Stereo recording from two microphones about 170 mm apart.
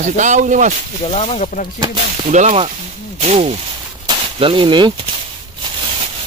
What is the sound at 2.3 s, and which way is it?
Speech, 45° right (ahead or behind).